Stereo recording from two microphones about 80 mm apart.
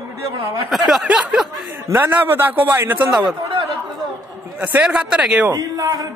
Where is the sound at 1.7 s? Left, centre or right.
Right.